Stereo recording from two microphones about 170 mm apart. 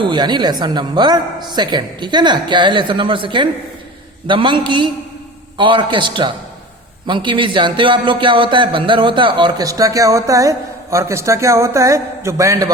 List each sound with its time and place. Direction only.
0.0 s a woman's voice: 25° right (ahead or behind)